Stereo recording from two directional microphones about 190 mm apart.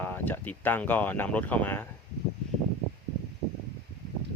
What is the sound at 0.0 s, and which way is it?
Speech, 10° left (ahead or behind).